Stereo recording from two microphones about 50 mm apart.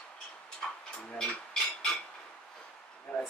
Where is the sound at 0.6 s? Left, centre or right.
Centre.